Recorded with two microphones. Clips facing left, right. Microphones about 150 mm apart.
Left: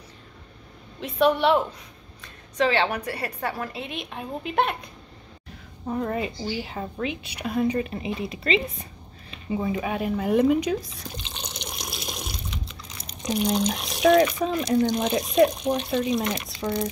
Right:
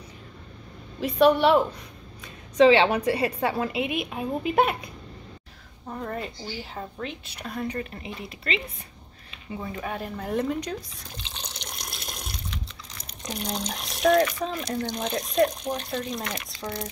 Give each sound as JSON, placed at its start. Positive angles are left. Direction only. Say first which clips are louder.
{"t": 1.0, "sound": "speech", "louder": "right 2 dB", "side_deg": 0}
{"t": 2.2, "sound": "a woman's voice", "louder": "right 7 dB", "side_deg": -20}
{"t": 5.9, "sound": "speech", "louder": "left 5 dB", "side_deg": 5}
{"t": 7.4, "sound": "speech", "louder": "left 7 dB", "side_deg": 15}
{"t": 11.1, "sound": "water", "louder": "left 4 dB", "side_deg": 5}
{"t": 13.2, "sound": "speech", "louder": "left 8 dB", "side_deg": 5}
{"t": 15.6, "sound": "speech", "louder": "left 5 dB", "side_deg": 20}
{"t": 15.9, "sound": "speech", "louder": "left 7 dB", "side_deg": 5}